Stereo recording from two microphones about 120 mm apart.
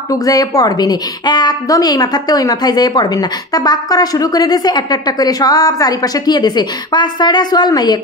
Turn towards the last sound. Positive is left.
turn(degrees=35)  # may be behind; listen again after turning